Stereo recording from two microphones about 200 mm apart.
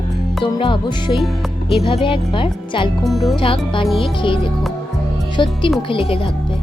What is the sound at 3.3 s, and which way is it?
Speech, 25° left (ahead or behind).